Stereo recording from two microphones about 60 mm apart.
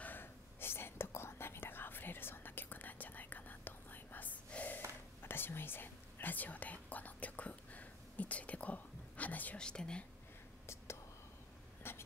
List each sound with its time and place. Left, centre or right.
0.0 s whispering: left
5.2 s whispering: left
9.6 s whispering: centre
11.8 s a sound: left